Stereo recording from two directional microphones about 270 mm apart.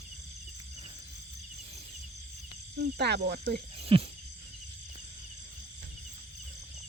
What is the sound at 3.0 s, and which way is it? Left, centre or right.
Speech, right.